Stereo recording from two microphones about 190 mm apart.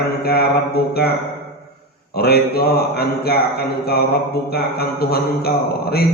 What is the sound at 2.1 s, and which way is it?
A man's voice, 55° left (ahead or behind).